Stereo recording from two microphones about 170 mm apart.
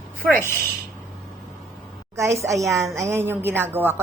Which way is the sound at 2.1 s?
15° right (ahead or behind).